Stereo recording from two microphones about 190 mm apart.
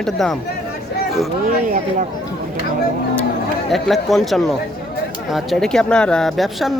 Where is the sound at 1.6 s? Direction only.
45° right (ahead or behind).